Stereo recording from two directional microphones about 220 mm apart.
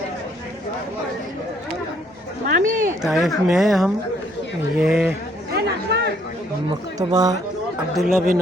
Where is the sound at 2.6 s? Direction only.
35° right (ahead or behind).